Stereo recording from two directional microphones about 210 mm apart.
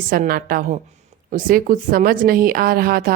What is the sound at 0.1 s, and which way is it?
A woman's voice, 45° right (ahead or behind).